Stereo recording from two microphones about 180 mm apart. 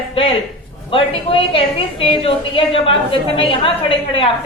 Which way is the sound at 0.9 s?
30° left (ahead or behind).